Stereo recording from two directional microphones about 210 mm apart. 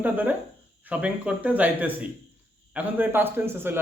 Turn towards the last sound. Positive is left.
turn(degrees=-10)  # may be behind; listen again after turning